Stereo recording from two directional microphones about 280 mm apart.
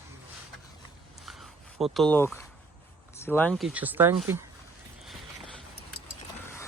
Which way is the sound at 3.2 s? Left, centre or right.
Centre.